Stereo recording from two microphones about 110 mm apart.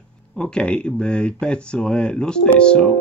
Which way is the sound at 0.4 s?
10° left (ahead or behind).